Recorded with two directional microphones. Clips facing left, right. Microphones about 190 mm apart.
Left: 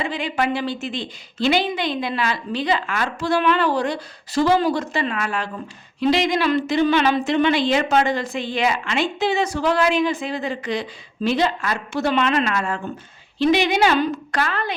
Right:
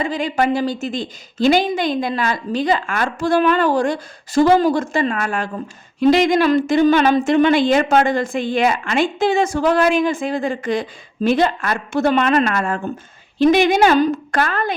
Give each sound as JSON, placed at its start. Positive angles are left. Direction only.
{"t": 0.0, "sound": "a woman's voice", "side_deg": -40}